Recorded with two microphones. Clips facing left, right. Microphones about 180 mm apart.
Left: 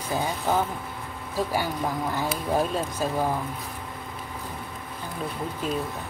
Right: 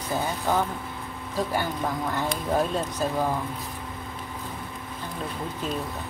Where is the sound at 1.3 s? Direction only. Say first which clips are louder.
Even; 10° left (ahead or behind).